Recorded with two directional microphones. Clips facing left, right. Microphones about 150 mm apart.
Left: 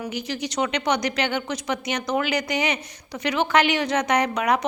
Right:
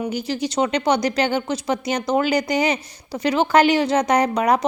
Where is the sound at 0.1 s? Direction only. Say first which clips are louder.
Right 5 dB; 30° right (ahead or behind).